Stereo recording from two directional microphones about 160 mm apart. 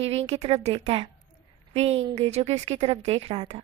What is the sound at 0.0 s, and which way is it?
A woman's voice, 40° right (ahead or behind).